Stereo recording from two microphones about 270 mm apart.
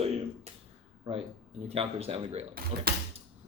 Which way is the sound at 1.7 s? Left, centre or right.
Right.